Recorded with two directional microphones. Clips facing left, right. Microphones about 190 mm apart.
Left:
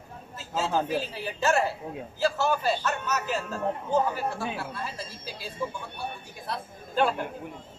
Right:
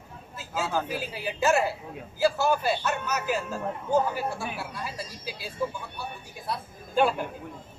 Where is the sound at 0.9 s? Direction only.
10° right (ahead or behind).